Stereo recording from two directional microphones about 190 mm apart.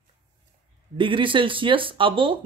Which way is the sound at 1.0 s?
25° right (ahead or behind).